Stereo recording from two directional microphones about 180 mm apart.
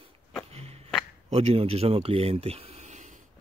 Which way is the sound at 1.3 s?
35° right (ahead or behind).